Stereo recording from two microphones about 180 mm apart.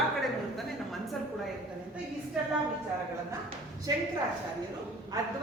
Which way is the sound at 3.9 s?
20° right (ahead or behind).